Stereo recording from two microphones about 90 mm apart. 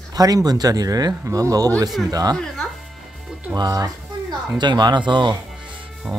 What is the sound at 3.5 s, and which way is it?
Speech, 50° right (ahead or behind).